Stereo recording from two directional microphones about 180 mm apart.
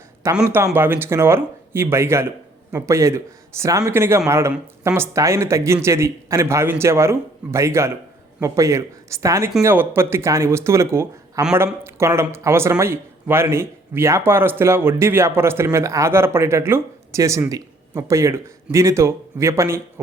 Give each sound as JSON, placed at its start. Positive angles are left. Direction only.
{"t": 0.4, "sound": "speech", "side_deg": -15}